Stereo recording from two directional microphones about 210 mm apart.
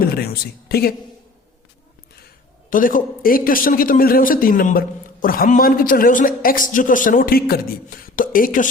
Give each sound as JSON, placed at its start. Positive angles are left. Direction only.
{"t": 0.0, "sound": "a woman's voice", "side_deg": 45}
{"t": 2.6, "sound": "a man's voice", "side_deg": 40}